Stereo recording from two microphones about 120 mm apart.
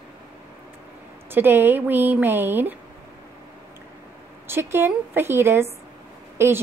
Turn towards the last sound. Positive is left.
turn(degrees=-20)  # may be behind; listen again after turning